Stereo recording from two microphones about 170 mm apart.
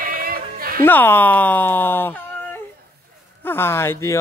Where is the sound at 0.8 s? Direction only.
10° left (ahead or behind).